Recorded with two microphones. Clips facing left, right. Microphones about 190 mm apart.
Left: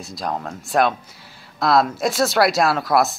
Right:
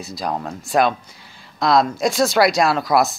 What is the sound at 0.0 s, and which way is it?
Speech, centre (ahead or behind).